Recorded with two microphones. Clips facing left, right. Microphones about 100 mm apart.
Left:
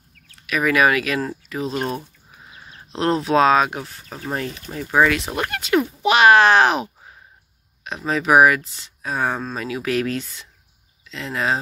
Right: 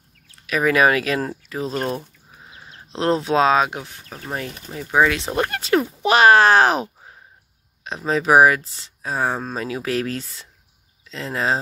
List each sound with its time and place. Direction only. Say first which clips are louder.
0.5 s speech: right 1 dB; 30° right (ahead or behind)
4.3 s speech: left 2 dB; 5° right (ahead or behind)
5.0 s speech: even; 30° right (ahead or behind)